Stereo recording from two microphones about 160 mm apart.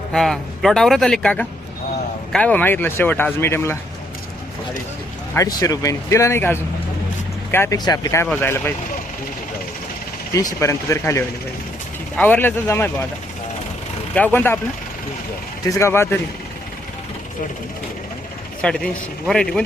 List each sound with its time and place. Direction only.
0.1 s speech: centre (ahead or behind)
5.3 s speech: 20° left (ahead or behind)
10.3 s speech: 20° left (ahead or behind)
14.3 s speech: 15° left (ahead or behind)
15.7 s speech: 15° left (ahead or behind)
18.6 s speech: 5° left (ahead or behind)